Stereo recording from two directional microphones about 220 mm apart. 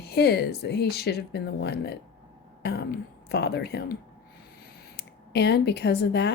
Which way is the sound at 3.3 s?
50° left (ahead or behind).